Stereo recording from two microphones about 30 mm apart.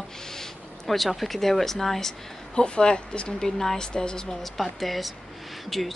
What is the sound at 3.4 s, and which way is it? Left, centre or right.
Speech, centre.